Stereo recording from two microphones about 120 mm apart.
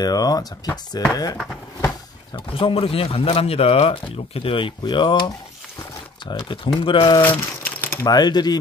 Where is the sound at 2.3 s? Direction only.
50° left (ahead or behind).